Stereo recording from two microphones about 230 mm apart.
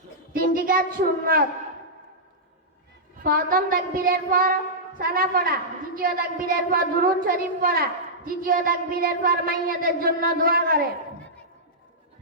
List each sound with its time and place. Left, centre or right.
0.3 s a woman's voice: right
3.2 s a woman's voice: right